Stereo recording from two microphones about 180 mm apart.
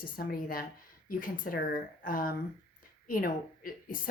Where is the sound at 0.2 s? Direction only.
55° left (ahead or behind).